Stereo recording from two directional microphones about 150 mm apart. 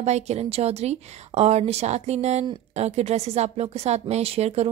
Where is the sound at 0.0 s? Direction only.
45° right (ahead or behind).